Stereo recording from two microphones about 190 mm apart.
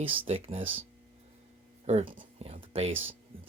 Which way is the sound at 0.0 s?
35° right (ahead or behind).